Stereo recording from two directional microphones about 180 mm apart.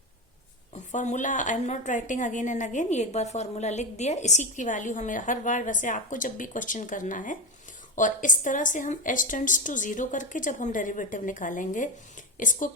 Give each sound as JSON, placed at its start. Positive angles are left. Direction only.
{"t": 0.9, "sound": "a woman's voice", "side_deg": 40}